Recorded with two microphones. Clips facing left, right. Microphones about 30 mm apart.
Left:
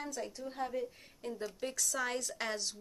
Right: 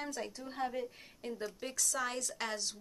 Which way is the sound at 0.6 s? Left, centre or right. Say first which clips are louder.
Right 1 dB; centre.